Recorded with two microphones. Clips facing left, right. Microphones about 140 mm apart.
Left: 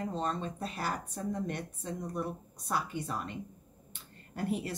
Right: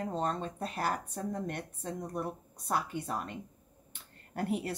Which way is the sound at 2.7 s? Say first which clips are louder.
Right 1 dB; 50° right (ahead or behind).